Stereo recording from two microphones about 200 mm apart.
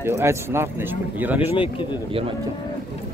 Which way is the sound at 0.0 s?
15° right (ahead or behind).